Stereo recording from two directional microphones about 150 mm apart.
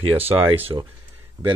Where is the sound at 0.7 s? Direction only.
25° right (ahead or behind).